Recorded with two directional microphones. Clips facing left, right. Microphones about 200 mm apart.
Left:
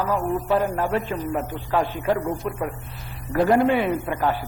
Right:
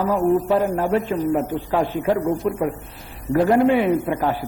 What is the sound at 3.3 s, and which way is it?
A man's voice, 15° right (ahead or behind).